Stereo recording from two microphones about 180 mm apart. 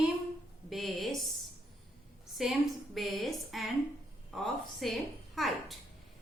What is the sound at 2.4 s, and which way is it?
A woman's voice, centre (ahead or behind).